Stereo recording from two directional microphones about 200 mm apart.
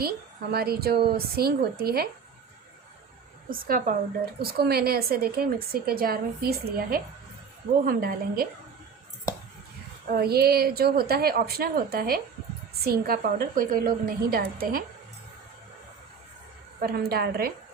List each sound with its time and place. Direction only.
0.5 s a woman's voice: 50° right (ahead or behind)
3.5 s a woman's voice: 45° right (ahead or behind)
10.1 s a woman's voice: 50° right (ahead or behind)
16.8 s a woman's voice: 50° right (ahead or behind)